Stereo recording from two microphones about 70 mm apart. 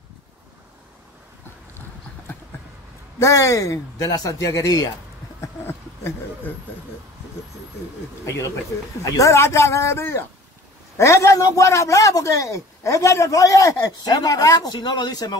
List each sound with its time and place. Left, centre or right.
3.2 s a man's voice: left
5.7 s a sound: left
9.0 s a man's voice: left